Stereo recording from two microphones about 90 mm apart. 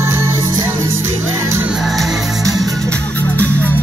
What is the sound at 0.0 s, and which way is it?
Music, 30° right (ahead or behind).